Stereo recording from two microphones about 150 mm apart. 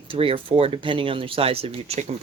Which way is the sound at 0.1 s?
35° right (ahead or behind).